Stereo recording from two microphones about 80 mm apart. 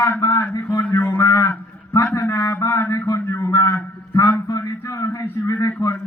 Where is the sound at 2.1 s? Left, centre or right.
Left.